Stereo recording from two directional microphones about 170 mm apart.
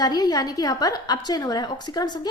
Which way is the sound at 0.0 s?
20° left (ahead or behind).